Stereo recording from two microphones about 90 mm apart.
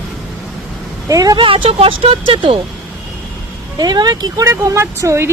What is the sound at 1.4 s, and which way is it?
Speech, 75° right (ahead or behind).